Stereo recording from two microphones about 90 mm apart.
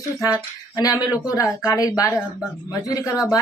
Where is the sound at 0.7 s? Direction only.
40° left (ahead or behind).